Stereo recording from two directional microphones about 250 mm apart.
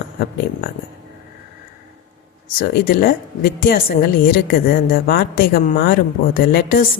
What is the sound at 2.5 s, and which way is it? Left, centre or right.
A woman's voice, left.